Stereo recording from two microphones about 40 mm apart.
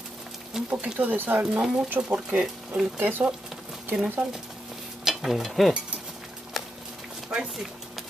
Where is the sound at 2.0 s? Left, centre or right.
Right.